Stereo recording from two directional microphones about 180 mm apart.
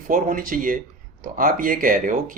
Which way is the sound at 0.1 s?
50° right (ahead or behind).